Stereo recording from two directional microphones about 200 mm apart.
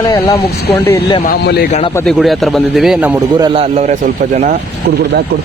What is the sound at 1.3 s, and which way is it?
Speech, 50° left (ahead or behind).